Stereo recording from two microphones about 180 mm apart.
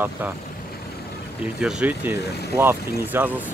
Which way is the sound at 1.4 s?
5° right (ahead or behind).